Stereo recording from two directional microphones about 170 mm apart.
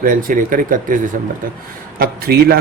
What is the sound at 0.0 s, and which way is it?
Speech, 55° right (ahead or behind).